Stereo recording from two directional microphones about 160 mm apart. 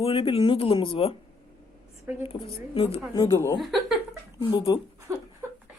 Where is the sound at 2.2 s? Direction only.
35° left (ahead or behind).